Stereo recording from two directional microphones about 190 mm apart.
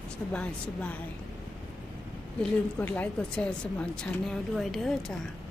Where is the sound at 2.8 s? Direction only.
10° left (ahead or behind).